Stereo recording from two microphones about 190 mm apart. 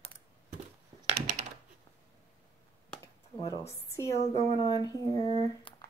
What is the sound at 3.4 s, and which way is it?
Speech, 15° left (ahead or behind).